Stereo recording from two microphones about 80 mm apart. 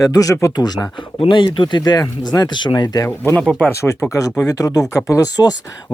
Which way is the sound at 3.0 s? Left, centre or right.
Left.